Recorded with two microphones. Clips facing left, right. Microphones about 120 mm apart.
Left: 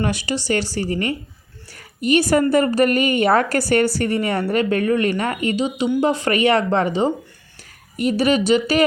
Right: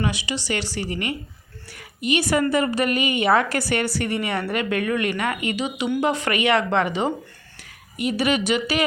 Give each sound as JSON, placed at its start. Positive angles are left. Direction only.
{"t": 0.0, "sound": "a woman's voice", "side_deg": 45}